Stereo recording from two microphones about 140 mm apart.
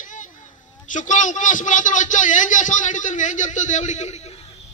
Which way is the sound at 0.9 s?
65° left (ahead or behind).